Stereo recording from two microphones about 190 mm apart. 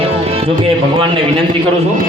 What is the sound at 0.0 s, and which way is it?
Music, 30° right (ahead or behind).